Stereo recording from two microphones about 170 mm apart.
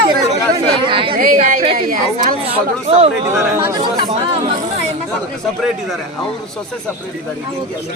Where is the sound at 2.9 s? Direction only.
35° right (ahead or behind).